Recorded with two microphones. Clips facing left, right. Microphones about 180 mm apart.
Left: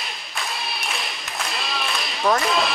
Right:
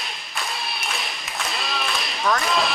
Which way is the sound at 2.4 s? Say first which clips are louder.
Left 1 dB; centre (ahead or behind).